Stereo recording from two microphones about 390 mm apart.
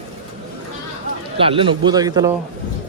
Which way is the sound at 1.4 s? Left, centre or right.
Centre.